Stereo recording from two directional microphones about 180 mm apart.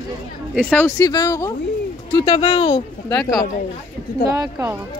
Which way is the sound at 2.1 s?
30° left (ahead or behind).